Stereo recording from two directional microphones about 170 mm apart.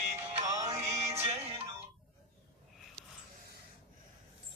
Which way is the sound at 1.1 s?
35° right (ahead or behind).